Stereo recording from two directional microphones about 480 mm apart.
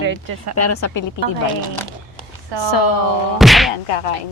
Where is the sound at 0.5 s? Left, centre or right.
Left.